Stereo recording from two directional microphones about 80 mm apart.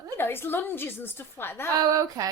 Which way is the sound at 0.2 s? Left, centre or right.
Left.